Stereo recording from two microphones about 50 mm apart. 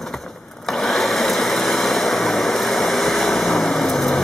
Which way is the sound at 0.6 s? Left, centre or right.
Centre.